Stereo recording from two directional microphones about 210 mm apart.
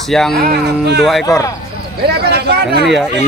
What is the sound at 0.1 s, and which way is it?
Speech, centre (ahead or behind).